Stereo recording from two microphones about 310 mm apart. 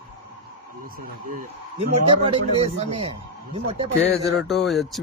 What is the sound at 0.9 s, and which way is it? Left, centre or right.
Speech, right.